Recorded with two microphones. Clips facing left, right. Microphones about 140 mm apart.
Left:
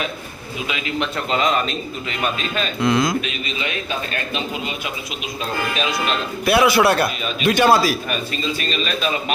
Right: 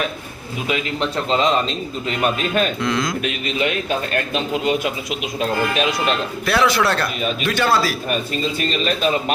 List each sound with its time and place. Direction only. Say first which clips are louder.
0.7 s speech: right 3 dB; 30° right (ahead or behind)
2.0 s a man's voice: right 5 dB; 50° right (ahead or behind)
2.8 s a man's voice: left 3 dB; 10° left (ahead or behind)
3.2 s a man's voice: right 4 dB; 60° right (ahead or behind)
6.4 s a man's voice: left 4 dB; 10° left (ahead or behind)